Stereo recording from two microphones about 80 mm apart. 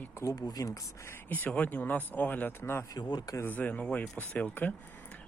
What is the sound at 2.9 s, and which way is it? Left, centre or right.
Speech, left.